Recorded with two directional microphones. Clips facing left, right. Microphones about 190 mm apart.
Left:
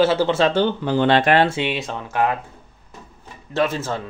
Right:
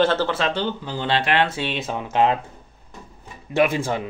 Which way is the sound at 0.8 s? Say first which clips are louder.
Left 8 dB; 60° left (ahead or behind).